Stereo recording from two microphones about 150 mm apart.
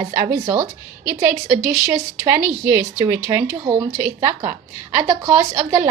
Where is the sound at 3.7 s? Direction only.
5° right (ahead or behind).